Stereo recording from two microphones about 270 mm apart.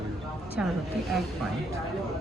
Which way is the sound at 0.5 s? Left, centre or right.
Centre.